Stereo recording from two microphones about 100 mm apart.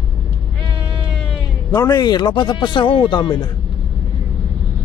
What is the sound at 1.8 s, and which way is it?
Speech, 40° left (ahead or behind).